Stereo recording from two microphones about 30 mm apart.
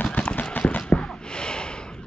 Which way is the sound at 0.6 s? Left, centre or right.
Left.